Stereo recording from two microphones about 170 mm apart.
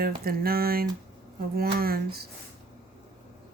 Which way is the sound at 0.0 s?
60° right (ahead or behind).